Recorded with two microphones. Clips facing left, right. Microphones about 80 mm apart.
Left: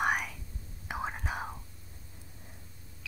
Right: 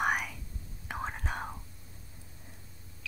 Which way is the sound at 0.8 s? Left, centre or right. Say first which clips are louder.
Left 1 dB; centre.